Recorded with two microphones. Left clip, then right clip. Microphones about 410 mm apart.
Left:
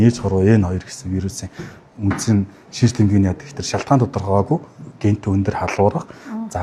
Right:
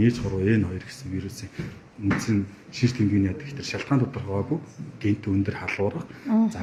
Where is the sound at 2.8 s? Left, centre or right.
Left.